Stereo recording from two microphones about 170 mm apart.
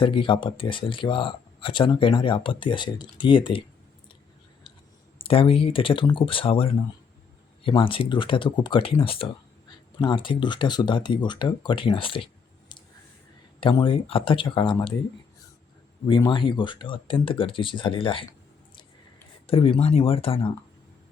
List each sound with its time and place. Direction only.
0.0 s speech: 30° left (ahead or behind)
5.2 s speech: 35° left (ahead or behind)
16.0 s speech: 30° left (ahead or behind)
19.5 s speech: 35° left (ahead or behind)